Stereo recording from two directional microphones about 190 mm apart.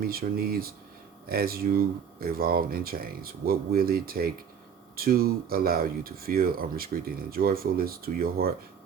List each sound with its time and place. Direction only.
0.0 s speech: 50° right (ahead or behind)